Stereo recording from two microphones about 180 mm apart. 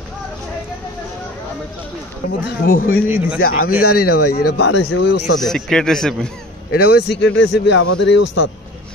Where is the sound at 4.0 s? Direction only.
60° left (ahead or behind); by 5.2 s 75° left (ahead or behind).